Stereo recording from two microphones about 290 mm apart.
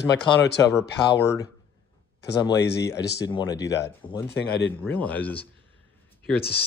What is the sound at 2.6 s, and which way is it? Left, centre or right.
Speech, left.